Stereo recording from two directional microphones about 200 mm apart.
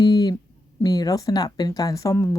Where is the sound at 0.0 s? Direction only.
20° left (ahead or behind).